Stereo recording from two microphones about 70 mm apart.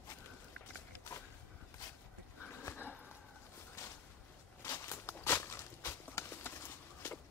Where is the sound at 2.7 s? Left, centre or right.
Left.